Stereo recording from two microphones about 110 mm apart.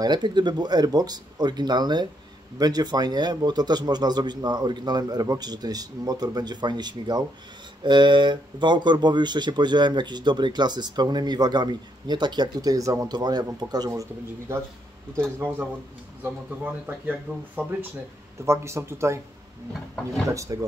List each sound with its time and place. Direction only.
0.0 s speech: 40° right (ahead or behind); by 14.6 s 25° right (ahead or behind)
16.2 s speech: 15° right (ahead or behind)
20.2 s speech: 30° right (ahead or behind)